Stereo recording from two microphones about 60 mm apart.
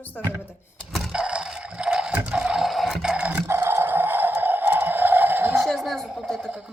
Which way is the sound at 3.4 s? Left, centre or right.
Right.